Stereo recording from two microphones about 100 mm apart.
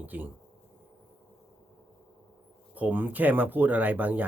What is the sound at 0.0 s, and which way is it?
Speech, 15° right (ahead or behind).